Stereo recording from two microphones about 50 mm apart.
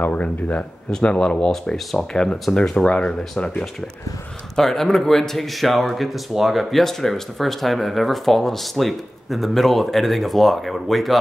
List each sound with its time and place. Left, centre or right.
0.0 s speech: left
0.9 s speech: centre